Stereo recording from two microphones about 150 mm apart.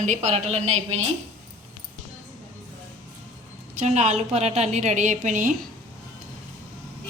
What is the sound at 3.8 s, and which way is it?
A woman's voice, 50° right (ahead or behind).